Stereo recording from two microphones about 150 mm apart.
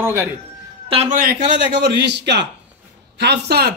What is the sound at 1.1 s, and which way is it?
Speech, 80° right.